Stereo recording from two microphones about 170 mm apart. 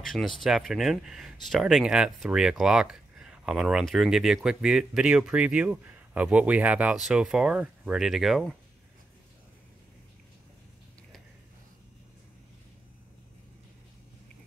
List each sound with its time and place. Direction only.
0.0 s speech: centre (ahead or behind)